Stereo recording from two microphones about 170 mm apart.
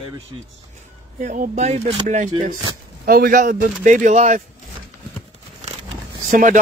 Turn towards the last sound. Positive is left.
turn(degrees=-50)  # may be behind; listen again after turning